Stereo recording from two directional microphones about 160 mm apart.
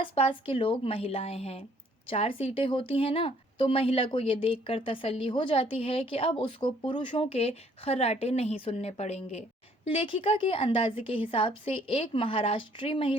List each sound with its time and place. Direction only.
0.0 s speech: 35° left (ahead or behind)